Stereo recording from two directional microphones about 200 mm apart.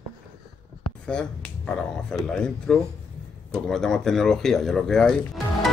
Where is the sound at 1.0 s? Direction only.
5° left (ahead or behind).